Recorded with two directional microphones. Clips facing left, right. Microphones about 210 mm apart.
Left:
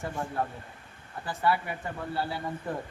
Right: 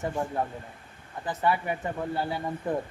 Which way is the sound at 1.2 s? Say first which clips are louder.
Right 2 dB; 20° right (ahead or behind).